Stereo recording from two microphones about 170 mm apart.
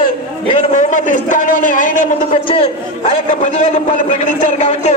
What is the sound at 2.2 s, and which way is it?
Speech, 30° left (ahead or behind).